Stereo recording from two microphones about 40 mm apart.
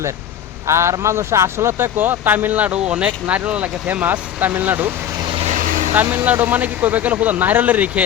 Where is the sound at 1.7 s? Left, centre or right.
Right.